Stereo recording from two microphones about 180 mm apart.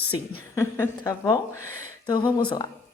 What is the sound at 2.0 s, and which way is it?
Speech, 25° left (ahead or behind).